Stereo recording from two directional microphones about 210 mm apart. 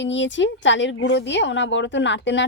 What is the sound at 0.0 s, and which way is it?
A woman's voice, 60° left (ahead or behind).